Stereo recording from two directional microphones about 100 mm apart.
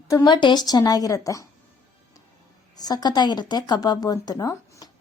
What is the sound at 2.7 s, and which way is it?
Speech, 40° left (ahead or behind).